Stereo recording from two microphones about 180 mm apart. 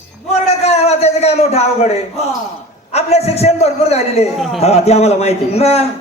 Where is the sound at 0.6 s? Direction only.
35° left (ahead or behind).